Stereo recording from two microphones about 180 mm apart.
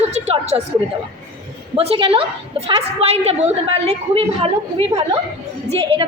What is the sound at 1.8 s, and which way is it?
A woman's voice, 30° right (ahead or behind).